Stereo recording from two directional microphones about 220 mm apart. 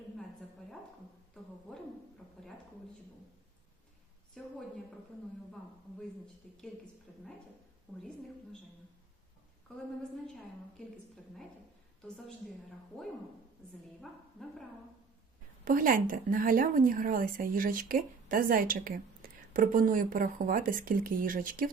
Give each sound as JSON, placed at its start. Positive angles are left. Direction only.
{"t": 4.4, "sound": "a woman's voice", "side_deg": 5}
{"t": 7.9, "sound": "a woman's voice", "side_deg": 5}
{"t": 12.0, "sound": "a woman's voice", "side_deg": 0}
{"t": 14.0, "sound": "a woman's voice", "side_deg": 0}
{"t": 15.6, "sound": "a woman's voice", "side_deg": -40}
{"t": 19.2, "sound": "a sound", "side_deg": -40}
{"t": 19.5, "sound": "a woman's voice", "side_deg": -40}